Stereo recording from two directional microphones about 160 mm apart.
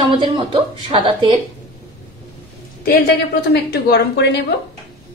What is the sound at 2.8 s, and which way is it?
A woman's voice, 75° left (ahead or behind).